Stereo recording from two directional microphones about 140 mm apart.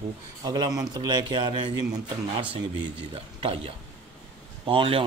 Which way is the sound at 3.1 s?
40° right (ahead or behind).